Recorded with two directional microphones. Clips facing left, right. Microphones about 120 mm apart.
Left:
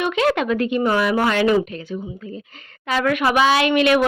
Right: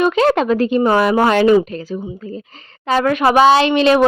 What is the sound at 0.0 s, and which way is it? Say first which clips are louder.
Speech: right 5 dB; 35° right (ahead or behind).